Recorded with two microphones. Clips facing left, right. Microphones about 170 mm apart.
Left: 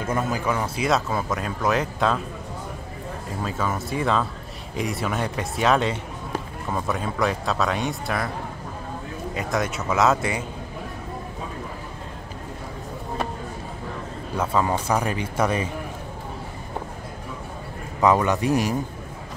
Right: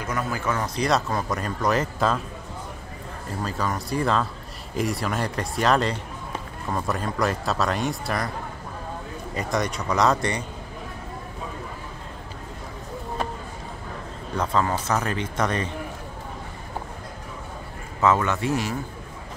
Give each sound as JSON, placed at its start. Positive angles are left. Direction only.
{"t": 0.3, "sound": "speech", "side_deg": 10}
{"t": 3.4, "sound": "speech", "side_deg": 0}
{"t": 9.3, "sound": "speech", "side_deg": 0}
{"t": 14.3, "sound": "speech", "side_deg": 10}
{"t": 18.0, "sound": "speech", "side_deg": 15}